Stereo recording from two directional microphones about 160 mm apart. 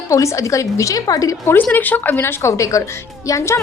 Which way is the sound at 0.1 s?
20° left (ahead or behind).